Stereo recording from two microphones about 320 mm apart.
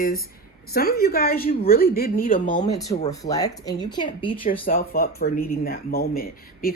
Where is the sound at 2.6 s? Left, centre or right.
Centre.